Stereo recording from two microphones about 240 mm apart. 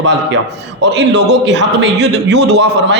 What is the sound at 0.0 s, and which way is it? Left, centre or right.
A man's voice, right.